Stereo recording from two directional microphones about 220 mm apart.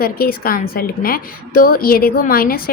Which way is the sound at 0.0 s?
40° left (ahead or behind).